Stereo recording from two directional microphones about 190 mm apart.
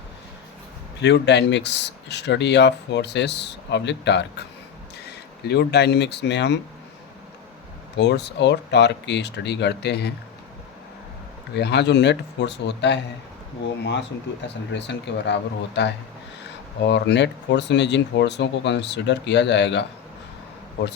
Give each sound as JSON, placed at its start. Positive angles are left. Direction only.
{"t": 1.0, "sound": "speech", "side_deg": 65}
{"t": 7.9, "sound": "speech", "side_deg": 65}
{"t": 11.5, "sound": "speech", "side_deg": 60}
{"t": 14.4, "sound": "speech", "side_deg": 65}